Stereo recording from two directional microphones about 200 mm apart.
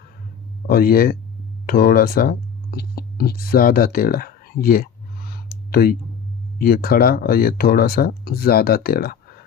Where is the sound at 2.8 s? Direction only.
50° left (ahead or behind).